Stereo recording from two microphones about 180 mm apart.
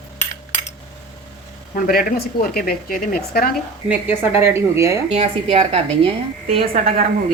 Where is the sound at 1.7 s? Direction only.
50° left (ahead or behind).